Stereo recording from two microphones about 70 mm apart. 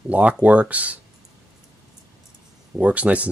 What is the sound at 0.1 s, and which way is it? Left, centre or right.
Speech, right.